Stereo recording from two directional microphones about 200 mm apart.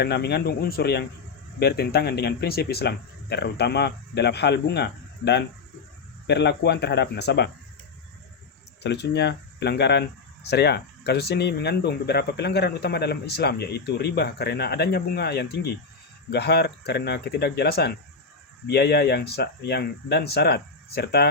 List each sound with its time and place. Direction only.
0.0 s speech: 55° left (ahead or behind)
8.8 s speech: 60° left (ahead or behind)